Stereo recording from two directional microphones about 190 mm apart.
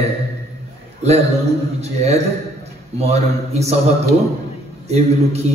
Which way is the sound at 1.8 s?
35° right (ahead or behind).